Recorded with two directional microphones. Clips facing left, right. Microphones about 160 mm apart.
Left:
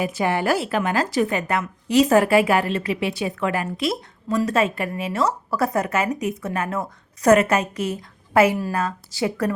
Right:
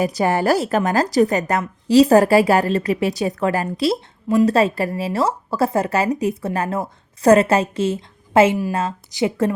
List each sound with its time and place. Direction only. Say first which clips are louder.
0.0 s a woman's voice: right 4 dB; 40° right (ahead or behind); by 9.6 s 20° right (ahead or behind)